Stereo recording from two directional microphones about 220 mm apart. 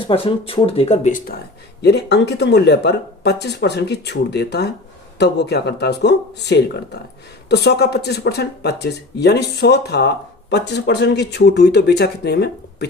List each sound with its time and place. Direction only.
0.0 s speech: 25° left (ahead or behind)
1.8 s speech: 50° left (ahead or behind)